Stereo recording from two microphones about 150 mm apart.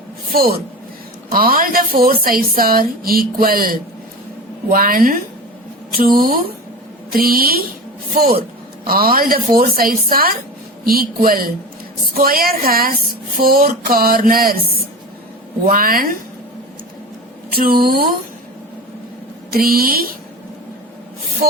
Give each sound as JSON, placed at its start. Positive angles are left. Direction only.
{"t": 0.3, "sound": "a woman's voice", "side_deg": -80}
{"t": 8.8, "sound": "speech", "side_deg": -75}
{"t": 17.5, "sound": "a woman's voice", "side_deg": -85}
{"t": 19.5, "sound": "a woman's voice", "side_deg": -80}